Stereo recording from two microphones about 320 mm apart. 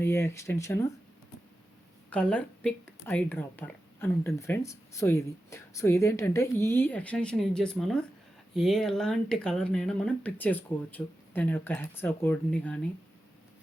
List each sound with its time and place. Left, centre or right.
0.0 s speech: centre
2.0 s speech: centre